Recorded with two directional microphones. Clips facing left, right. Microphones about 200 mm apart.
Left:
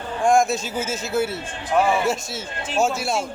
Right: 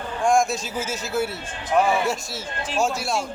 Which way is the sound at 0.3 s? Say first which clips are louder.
Left 2 dB; centre (ahead or behind).